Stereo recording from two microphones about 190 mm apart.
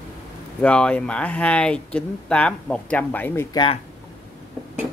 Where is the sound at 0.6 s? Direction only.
5° left (ahead or behind).